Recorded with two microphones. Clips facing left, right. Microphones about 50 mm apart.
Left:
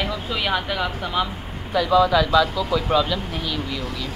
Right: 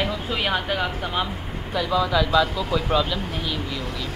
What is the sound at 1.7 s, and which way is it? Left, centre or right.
Speech, centre.